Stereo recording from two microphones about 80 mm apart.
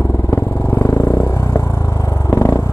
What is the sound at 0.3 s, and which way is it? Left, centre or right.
Vehicle, left.